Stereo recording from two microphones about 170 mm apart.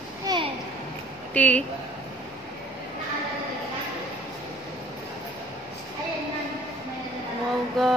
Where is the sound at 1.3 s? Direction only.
10° left (ahead or behind).